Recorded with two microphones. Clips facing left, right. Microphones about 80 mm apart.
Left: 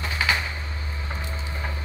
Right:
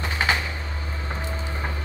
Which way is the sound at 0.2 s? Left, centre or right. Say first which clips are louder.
Right 1 dB; right.